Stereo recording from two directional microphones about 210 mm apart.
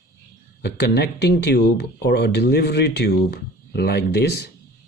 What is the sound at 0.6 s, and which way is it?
Speech, 50° left (ahead or behind).